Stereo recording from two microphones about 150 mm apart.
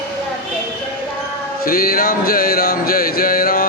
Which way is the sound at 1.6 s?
75° left (ahead or behind).